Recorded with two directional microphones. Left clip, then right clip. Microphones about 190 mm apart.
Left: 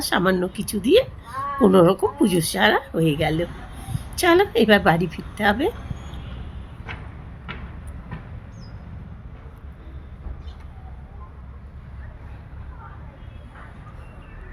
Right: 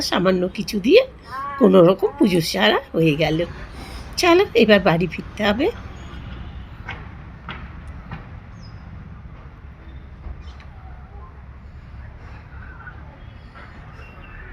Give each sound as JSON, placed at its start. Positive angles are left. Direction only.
{"t": 0.0, "sound": "speech", "side_deg": 15}